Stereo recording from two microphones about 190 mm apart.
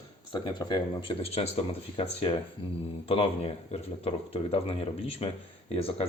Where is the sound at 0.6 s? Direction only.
25° left (ahead or behind).